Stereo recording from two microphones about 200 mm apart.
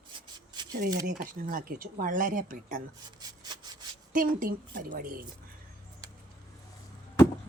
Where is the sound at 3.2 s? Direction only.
20° right (ahead or behind).